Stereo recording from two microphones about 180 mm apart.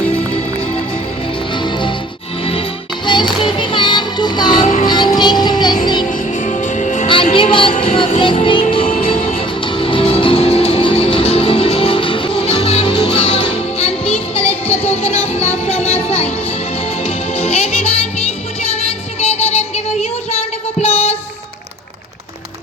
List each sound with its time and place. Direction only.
1.5 s music: 25° left (ahead or behind)
4.6 s music: 45° left (ahead or behind)
4.9 s music: 25° left (ahead or behind)
6.1 s music: 45° left (ahead or behind)
7.3 s a sound: 30° left (ahead or behind)
7.9 s music: 30° left (ahead or behind)
19.2 s music: 35° left (ahead or behind)